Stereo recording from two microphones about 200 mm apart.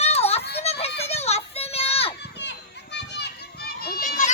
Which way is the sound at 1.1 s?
30° left (ahead or behind).